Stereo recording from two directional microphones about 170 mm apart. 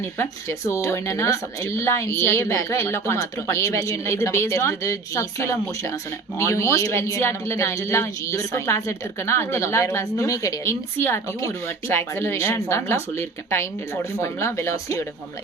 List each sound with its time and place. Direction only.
0.0 s speech: 15° left (ahead or behind)